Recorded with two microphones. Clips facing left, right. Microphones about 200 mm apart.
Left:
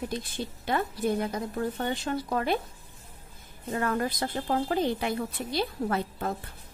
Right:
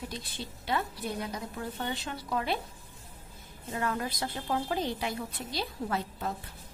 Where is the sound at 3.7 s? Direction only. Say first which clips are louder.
Left 4 dB; 50° left (ahead or behind).